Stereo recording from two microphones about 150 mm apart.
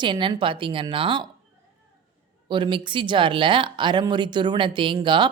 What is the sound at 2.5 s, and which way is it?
A woman's voice, 30° right (ahead or behind).